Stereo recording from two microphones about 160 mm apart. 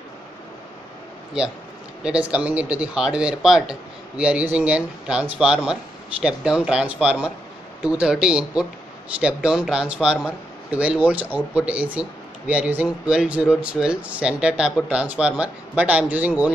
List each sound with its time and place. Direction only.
2.0 s speech: 5° right (ahead or behind)